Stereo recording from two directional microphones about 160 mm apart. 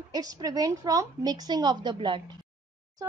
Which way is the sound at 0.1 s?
25° right (ahead or behind).